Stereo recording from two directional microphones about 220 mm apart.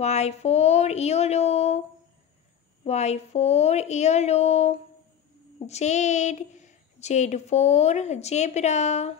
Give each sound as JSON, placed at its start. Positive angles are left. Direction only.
{"t": 0.0, "sound": "speech", "side_deg": 30}
{"t": 2.8, "sound": "a woman's voice", "side_deg": 30}